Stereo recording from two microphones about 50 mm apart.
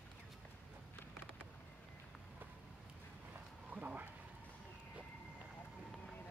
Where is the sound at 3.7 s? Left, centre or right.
Right.